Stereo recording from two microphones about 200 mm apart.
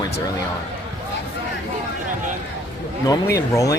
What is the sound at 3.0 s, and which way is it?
Speech, 15° left (ahead or behind).